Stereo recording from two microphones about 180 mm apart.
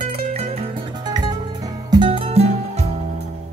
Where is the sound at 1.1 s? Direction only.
25° right (ahead or behind).